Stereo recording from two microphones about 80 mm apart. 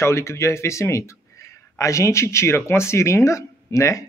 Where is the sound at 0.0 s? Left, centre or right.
Left.